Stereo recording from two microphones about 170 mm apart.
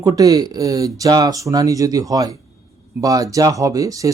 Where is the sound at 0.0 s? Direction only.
20° right (ahead or behind).